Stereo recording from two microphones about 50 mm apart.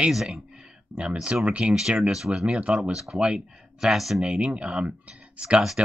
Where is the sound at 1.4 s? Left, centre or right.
Right.